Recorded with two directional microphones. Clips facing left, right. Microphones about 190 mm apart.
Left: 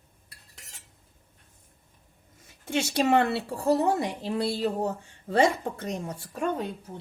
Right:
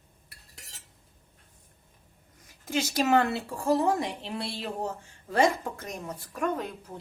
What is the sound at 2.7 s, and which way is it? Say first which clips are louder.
Speech: left 1 dB; 30° left (ahead or behind).